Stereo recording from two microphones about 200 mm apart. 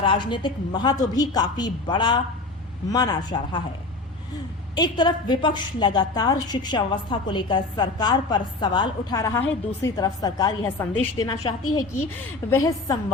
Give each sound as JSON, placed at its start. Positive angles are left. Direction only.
{"t": 0.0, "sound": "a woman's voice", "side_deg": 25}
{"t": 4.7, "sound": "a woman's voice", "side_deg": 20}